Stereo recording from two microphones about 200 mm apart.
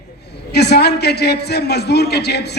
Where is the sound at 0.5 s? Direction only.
55° left (ahead or behind).